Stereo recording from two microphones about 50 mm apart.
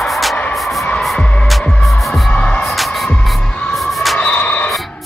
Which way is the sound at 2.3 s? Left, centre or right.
Left.